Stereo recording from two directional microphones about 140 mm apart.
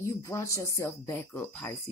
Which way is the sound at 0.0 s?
20° left (ahead or behind).